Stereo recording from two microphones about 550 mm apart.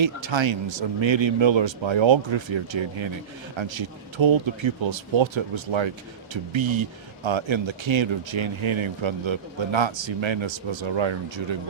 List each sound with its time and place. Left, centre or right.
0.0 s speech: right